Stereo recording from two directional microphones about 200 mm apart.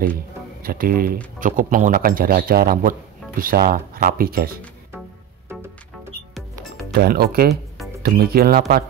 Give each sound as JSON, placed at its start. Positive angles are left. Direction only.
{"t": 0.6, "sound": "a man's voice", "side_deg": -45}
{"t": 6.9, "sound": "a man's voice", "side_deg": -50}
{"t": 7.4, "sound": "music", "side_deg": 0}
{"t": 8.0, "sound": "a man's voice", "side_deg": -50}